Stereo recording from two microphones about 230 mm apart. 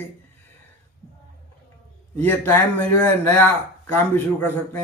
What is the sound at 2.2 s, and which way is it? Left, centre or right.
A man's voice, centre.